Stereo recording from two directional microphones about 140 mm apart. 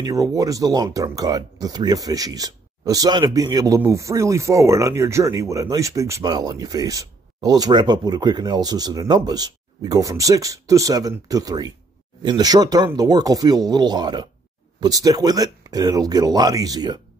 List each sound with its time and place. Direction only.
0.0 s speech: 25° right (ahead or behind)